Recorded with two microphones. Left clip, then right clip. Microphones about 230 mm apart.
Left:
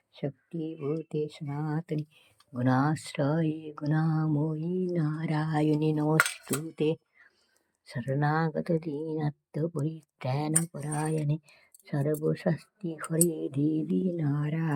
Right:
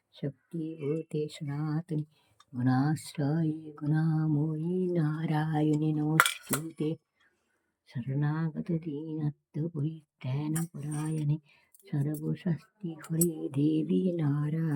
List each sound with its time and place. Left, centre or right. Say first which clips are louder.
0.1 s speech: left 3 dB; centre
4.6 s speech: even; centre
13.5 s a sound: right 1 dB; centre
14.3 s speech: left 1 dB; centre